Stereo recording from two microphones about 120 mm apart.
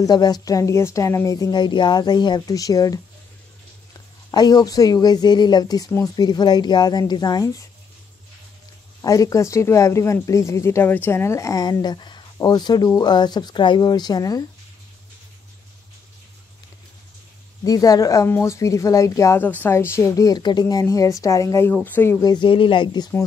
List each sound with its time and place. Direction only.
0.0 s speech: 35° left (ahead or behind)
4.3 s speech: 35° left (ahead or behind)
9.0 s speech: 30° left (ahead or behind)
17.6 s speech: 30° left (ahead or behind)
21.7 s speech: 15° left (ahead or behind)
22.2 s speech: 40° left (ahead or behind)